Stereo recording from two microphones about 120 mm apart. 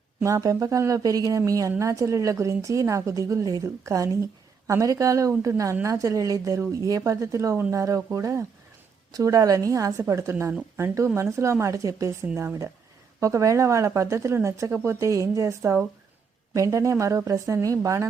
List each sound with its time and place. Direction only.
0.2 s a woman's voice: 25° right (ahead or behind)